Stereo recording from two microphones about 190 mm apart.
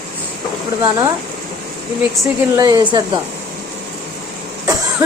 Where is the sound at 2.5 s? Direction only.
20° right (ahead or behind).